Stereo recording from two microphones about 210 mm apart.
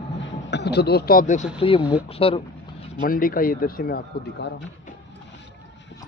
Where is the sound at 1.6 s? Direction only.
25° left (ahead or behind).